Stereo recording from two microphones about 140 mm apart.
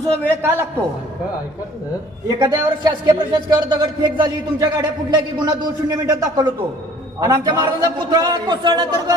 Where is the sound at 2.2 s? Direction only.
30° right (ahead or behind).